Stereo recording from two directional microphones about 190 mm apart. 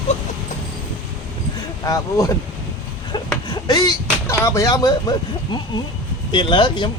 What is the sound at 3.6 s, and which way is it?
Speech, 20° left (ahead or behind).